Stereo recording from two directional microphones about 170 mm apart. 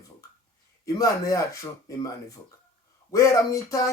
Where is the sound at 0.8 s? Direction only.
20° left (ahead or behind).